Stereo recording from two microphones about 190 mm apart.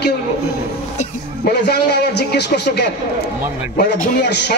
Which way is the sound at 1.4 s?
55° left (ahead or behind).